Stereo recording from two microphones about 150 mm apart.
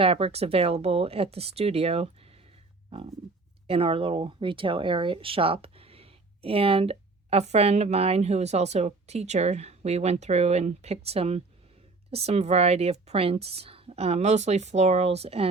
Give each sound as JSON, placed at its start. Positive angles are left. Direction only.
{"t": 0.0, "sound": "speech", "side_deg": -40}